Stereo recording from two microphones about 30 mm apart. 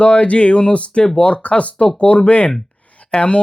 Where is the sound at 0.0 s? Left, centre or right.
Left.